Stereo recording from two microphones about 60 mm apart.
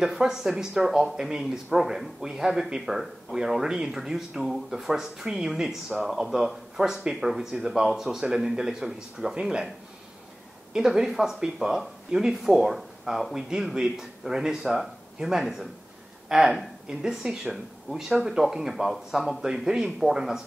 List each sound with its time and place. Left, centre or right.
0.0 s speech: centre
10.7 s speech: centre